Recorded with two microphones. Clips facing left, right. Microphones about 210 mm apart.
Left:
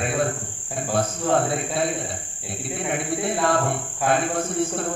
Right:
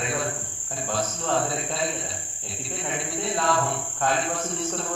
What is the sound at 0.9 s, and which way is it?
A man's voice, 60° left (ahead or behind).